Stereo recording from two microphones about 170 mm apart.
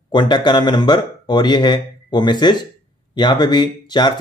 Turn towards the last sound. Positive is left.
turn(degrees=25)  # may be behind; listen again after turning